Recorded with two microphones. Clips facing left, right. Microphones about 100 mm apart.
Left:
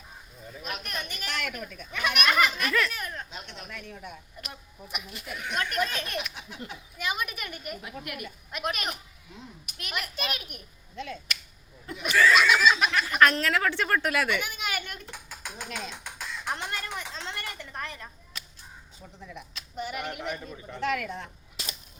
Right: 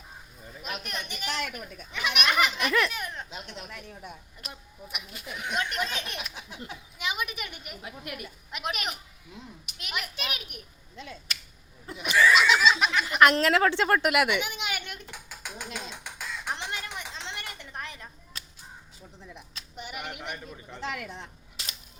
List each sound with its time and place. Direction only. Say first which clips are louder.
0.6 s a child's voice: even; 20° right (ahead or behind)
4.9 s a child's voice: left 2 dB; 20° right (ahead or behind)
7.9 s a child's voice: left 1 dB; 30° right (ahead or behind)
8.5 s speech: left 1 dB; 15° right (ahead or behind)
11.9 s speech: even; 20° right (ahead or behind)
13.3 s a child's voice: right 4 dB; 30° right (ahead or behind)
15.5 s a sound: left 1 dB; 15° right (ahead or behind)
19.7 s a sound: left 5 dB; 15° right (ahead or behind)
20.8 s a child's voice: left 6 dB; 25° right (ahead or behind)